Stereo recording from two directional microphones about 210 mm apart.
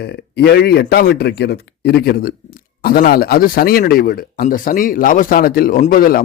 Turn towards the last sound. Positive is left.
turn(degrees=40)  # may be behind; listen again after turning